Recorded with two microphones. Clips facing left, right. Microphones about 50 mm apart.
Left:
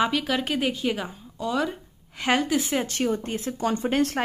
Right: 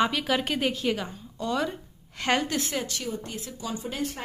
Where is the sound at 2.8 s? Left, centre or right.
Left.